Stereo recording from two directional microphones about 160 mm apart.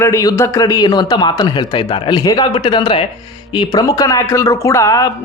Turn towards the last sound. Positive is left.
turn(degrees=20)  # may be behind; listen again after turning